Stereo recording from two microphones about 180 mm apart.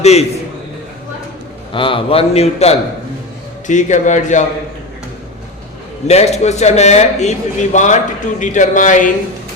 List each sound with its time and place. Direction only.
0.0 s a man's voice: 35° left (ahead or behind)
1.7 s a man's voice: 30° left (ahead or behind)
6.1 s a man's voice: 35° left (ahead or behind)